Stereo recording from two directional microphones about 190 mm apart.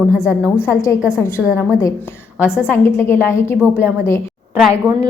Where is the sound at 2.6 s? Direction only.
15° left (ahead or behind).